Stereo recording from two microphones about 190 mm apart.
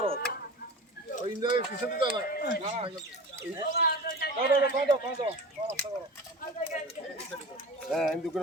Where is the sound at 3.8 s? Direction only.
55° left (ahead or behind).